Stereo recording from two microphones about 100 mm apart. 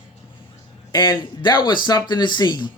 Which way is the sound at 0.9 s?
45° left (ahead or behind).